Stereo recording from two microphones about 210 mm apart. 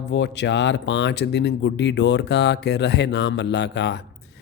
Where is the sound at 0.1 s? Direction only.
55° left (ahead or behind).